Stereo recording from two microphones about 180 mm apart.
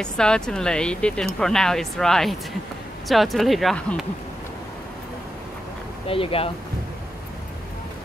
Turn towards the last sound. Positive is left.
turn(degrees=30)  # may be behind; listen again after turning